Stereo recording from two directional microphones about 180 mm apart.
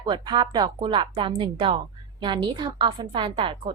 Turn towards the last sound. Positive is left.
turn(degrees=-30)  # may be behind; listen again after turning